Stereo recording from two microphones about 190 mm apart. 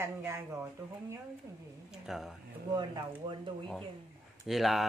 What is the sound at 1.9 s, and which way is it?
Speech, centre (ahead or behind).